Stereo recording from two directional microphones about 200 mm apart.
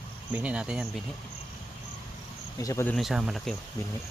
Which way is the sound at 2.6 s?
15° left (ahead or behind).